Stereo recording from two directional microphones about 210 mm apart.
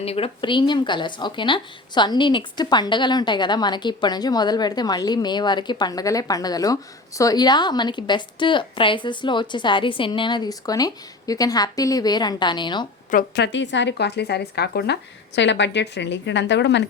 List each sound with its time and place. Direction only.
0.0 s speech: 30° left (ahead or behind)
13.1 s a woman's voice: 45° left (ahead or behind)